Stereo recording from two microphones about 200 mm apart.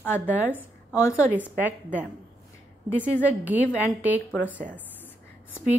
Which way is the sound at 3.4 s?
10° right (ahead or behind).